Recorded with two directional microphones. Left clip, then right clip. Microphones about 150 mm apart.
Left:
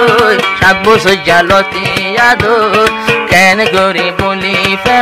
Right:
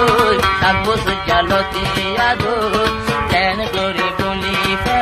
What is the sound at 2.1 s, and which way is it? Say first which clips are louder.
Music: left 10 dB; 25° left (ahead or behind).